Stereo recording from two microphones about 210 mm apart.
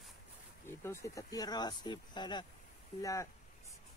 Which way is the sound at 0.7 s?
10° left (ahead or behind).